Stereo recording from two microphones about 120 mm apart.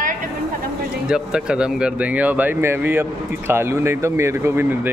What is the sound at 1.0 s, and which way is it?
Speech, 5° right (ahead or behind).